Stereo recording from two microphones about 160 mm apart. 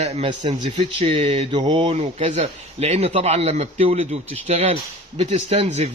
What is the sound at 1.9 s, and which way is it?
A man's voice, 45° right (ahead or behind).